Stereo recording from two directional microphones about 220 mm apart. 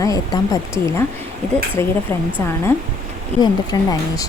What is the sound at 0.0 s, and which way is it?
Speech, 15° left (ahead or behind).